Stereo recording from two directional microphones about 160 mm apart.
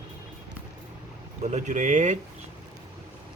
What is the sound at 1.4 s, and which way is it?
Speech, 45° right (ahead or behind).